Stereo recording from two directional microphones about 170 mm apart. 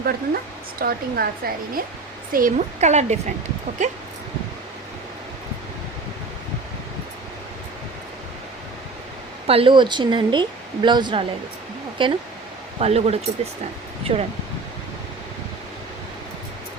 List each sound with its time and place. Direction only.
0.8 s a woman's voice: 60° right (ahead or behind)
2.3 s speech: 50° right (ahead or behind)
9.5 s speech: 30° right (ahead or behind)